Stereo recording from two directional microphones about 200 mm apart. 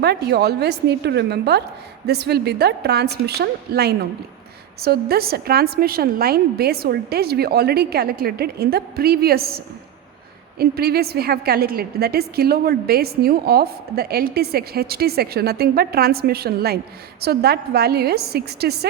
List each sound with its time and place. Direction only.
0.0 s a woman's voice: 55° right (ahead or behind)